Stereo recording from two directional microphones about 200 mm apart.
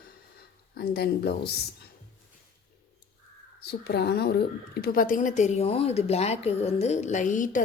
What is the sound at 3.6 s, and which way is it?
Speech, 55° left (ahead or behind).